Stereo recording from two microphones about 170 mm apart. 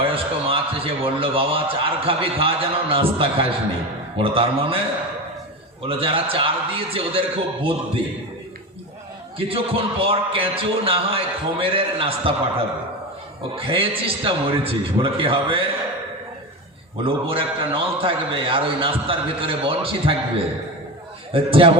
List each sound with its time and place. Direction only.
0.0 s a man's voice: 35° right (ahead or behind)
5.8 s a man's voice: 30° right (ahead or behind)
9.5 s a man's voice: 35° right (ahead or behind)
17.0 s a man's voice: 35° right (ahead or behind)
21.3 s a man's voice: 30° right (ahead or behind)